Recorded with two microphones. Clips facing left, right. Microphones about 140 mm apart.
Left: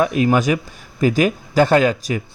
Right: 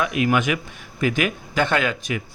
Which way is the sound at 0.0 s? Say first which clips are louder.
Left 5 dB; 35° left (ahead or behind).